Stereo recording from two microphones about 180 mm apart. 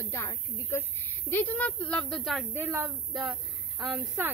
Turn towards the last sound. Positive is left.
turn(degrees=-10)  # may be behind; listen again after turning